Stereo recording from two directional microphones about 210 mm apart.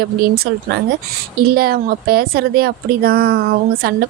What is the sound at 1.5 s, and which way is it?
A woman's voice, 45° right (ahead or behind).